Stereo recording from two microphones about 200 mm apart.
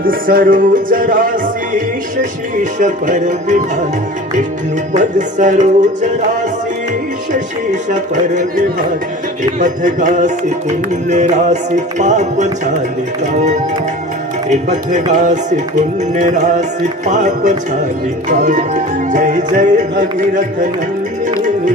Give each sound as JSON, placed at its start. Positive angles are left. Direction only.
{"t": 0.0, "sound": "music", "side_deg": -45}
{"t": 2.7, "sound": "music", "side_deg": -40}
{"t": 4.9, "sound": "music", "side_deg": -40}
{"t": 7.3, "sound": "music", "side_deg": -40}
{"t": 14.5, "sound": "music", "side_deg": -35}